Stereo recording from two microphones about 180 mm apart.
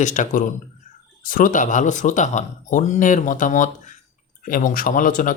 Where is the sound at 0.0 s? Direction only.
45° left (ahead or behind).